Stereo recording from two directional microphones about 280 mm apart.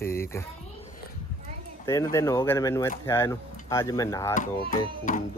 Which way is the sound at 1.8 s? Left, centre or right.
Centre.